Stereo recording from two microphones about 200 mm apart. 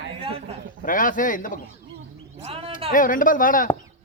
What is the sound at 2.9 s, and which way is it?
Speech, 40° left (ahead or behind).